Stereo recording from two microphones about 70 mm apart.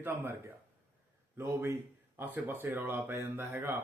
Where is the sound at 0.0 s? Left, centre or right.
Right.